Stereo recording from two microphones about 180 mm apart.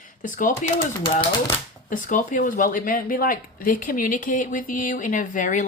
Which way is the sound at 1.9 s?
45° left (ahead or behind).